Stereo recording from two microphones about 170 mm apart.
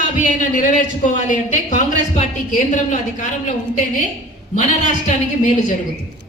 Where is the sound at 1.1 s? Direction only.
50° left (ahead or behind).